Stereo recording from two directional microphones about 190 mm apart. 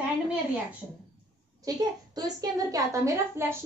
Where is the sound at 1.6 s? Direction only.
20° right (ahead or behind).